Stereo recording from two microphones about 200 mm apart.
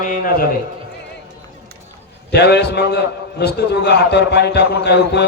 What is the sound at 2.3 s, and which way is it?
A man's voice, 55° left (ahead or behind).